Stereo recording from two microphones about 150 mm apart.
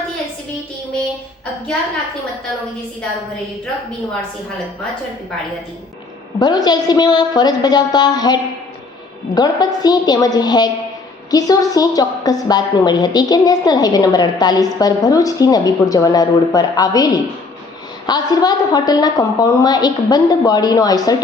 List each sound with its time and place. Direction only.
6.4 s a woman's voice: 25° left (ahead or behind)